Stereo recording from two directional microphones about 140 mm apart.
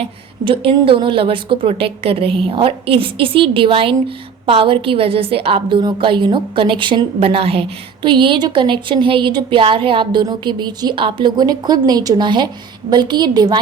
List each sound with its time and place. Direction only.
0.0 s speech: 40° right (ahead or behind)